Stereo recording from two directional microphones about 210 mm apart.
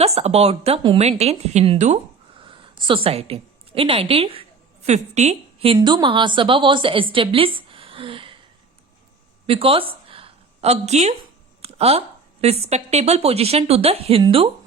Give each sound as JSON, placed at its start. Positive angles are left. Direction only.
{"t": 0.0, "sound": "a woman's voice", "side_deg": -30}
{"t": 2.4, "sound": "a sound", "side_deg": -25}
{"t": 4.1, "sound": "a woman's voice", "side_deg": -25}
{"t": 9.5, "sound": "a woman's voice", "side_deg": -25}